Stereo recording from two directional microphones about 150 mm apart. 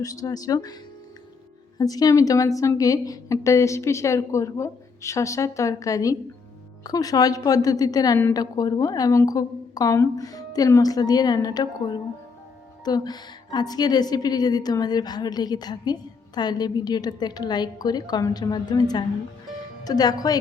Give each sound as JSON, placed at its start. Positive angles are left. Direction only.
{"t": 0.0, "sound": "a woman's voice", "side_deg": 25}
{"t": 1.8, "sound": "a woman's voice", "side_deg": 25}